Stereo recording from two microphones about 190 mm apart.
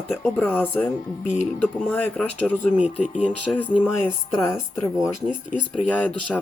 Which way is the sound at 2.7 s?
5° right (ahead or behind).